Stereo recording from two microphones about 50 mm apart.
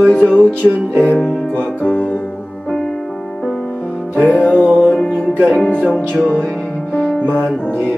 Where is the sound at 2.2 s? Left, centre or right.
Centre.